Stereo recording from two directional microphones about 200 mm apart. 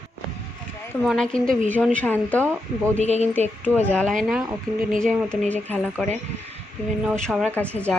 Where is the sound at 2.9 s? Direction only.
35° right (ahead or behind).